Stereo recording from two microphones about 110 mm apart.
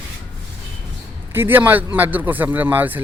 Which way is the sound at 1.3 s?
20° right (ahead or behind).